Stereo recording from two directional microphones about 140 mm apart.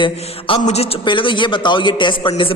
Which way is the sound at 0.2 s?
45° left (ahead or behind).